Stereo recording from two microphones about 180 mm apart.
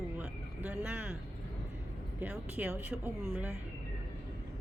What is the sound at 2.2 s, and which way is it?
Speech, 5° right (ahead or behind).